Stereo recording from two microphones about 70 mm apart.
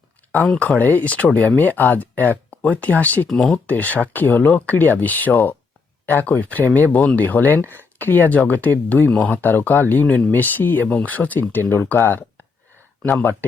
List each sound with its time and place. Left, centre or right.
0.8 s speech: left
3.2 s speech: centre
3.5 s speech: left
7.6 s speech: right
7.9 s speech: left